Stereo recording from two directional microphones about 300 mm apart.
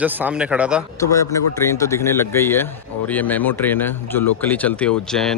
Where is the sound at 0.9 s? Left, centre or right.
Centre.